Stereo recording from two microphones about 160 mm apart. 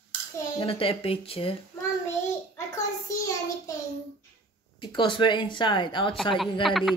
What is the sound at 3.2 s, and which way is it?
Speech, 20° left (ahead or behind).